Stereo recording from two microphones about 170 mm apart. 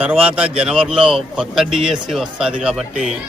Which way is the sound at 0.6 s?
5° right (ahead or behind).